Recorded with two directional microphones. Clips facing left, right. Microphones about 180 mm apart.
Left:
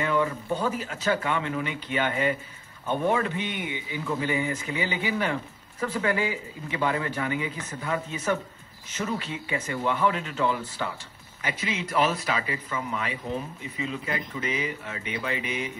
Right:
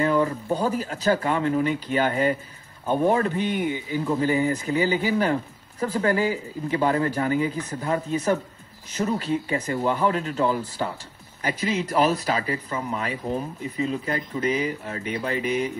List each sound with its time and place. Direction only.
0.0 s speech: 40° right (ahead or behind)